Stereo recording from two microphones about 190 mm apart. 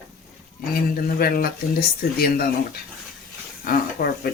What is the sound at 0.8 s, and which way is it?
Speech, 50° left (ahead or behind).